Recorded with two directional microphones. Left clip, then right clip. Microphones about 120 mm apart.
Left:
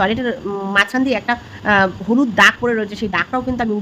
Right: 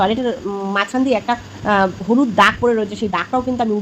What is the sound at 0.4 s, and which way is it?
Speech, 35° left (ahead or behind).